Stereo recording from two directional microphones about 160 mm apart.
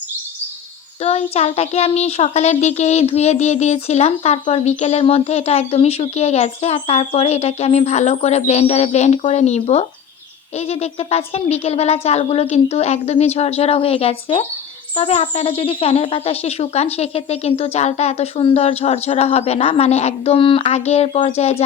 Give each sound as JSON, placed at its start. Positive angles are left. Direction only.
{"t": 1.0, "sound": "speech", "side_deg": 40}